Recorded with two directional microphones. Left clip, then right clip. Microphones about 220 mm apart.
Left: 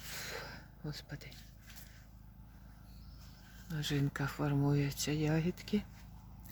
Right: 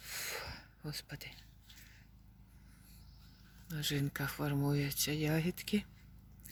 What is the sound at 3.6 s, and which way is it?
Speech, 5° right (ahead or behind).